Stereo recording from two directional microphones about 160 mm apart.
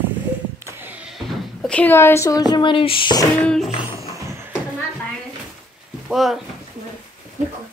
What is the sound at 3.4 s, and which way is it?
Speech, centre (ahead or behind).